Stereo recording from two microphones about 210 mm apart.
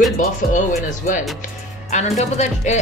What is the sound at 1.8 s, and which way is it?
Speech, 35° left (ahead or behind).